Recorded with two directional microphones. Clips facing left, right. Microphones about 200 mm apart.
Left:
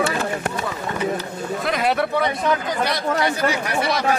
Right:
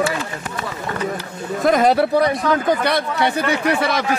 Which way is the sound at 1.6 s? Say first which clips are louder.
Right 7 dB; 45° right (ahead or behind).